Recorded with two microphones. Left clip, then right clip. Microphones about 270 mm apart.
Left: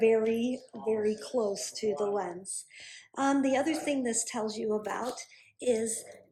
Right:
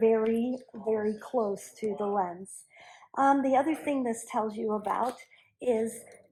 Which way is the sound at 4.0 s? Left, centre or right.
Centre.